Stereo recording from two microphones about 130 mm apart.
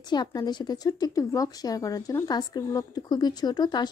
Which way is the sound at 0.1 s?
30° left (ahead or behind).